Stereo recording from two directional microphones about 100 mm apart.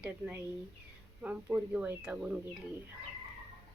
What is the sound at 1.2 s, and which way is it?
Speech, 15° right (ahead or behind).